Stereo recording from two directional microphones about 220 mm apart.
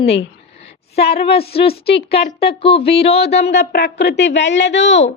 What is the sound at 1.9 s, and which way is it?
Speech, 50° left (ahead or behind).